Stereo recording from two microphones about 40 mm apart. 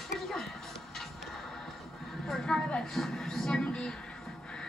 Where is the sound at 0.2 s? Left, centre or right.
Centre.